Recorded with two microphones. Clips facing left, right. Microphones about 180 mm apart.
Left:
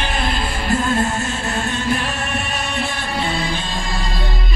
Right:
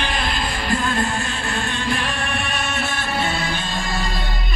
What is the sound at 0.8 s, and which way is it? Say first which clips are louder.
Music: left 3 dB; 45° left (ahead or behind).